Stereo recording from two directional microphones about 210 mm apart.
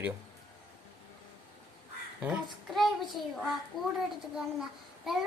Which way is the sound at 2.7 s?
Centre (ahead or behind).